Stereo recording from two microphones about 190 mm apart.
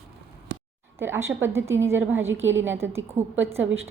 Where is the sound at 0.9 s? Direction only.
10° right (ahead or behind).